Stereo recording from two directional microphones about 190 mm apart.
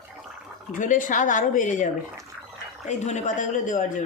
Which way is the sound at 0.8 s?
45° left (ahead or behind).